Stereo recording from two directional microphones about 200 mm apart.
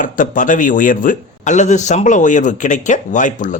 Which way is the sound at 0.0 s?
40° left (ahead or behind).